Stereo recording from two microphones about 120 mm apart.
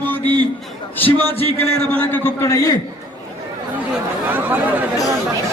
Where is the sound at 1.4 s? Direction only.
55° left (ahead or behind).